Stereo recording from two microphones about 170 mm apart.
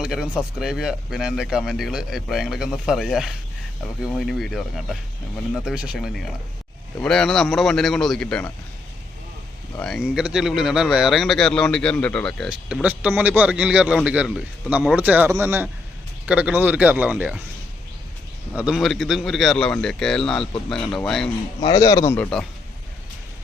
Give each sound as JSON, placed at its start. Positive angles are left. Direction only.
{"t": 0.0, "sound": "speech", "side_deg": -5}
{"t": 9.7, "sound": "a man's voice", "side_deg": 5}
{"t": 18.5, "sound": "speech", "side_deg": -5}
{"t": 21.6, "sound": "speech", "side_deg": 25}